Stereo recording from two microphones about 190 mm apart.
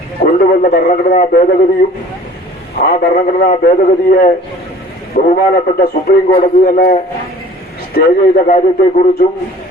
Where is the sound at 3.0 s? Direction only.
50° left (ahead or behind).